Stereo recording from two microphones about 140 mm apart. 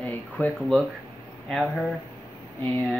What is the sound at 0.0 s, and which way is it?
Speech, 10° left (ahead or behind).